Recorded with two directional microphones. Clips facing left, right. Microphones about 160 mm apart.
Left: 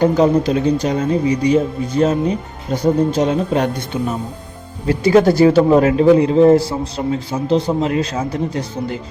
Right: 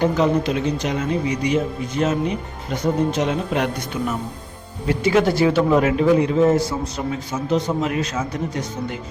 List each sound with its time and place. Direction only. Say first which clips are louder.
0.0 s speech: left 5 dB; 35° left (ahead or behind)